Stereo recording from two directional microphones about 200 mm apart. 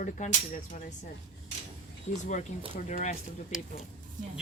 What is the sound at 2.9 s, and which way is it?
Speech, 35° left (ahead or behind).